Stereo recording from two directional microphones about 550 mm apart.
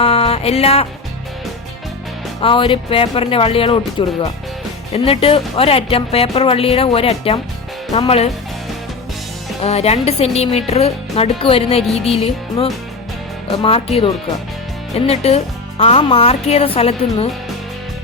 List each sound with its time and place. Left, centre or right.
0.0 s music: centre
2.4 s speech: centre
9.6 s speech: centre